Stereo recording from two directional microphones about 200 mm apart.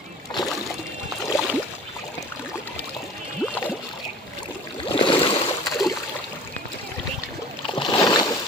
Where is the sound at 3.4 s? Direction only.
10° left (ahead or behind).